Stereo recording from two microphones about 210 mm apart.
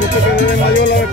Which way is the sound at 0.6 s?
55° left (ahead or behind).